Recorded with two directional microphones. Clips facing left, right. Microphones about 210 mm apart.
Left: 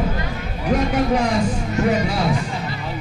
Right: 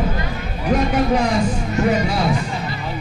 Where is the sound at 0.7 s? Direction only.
15° right (ahead or behind).